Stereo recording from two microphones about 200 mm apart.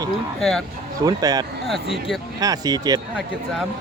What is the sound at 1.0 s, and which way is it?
Speech, 20° right (ahead or behind).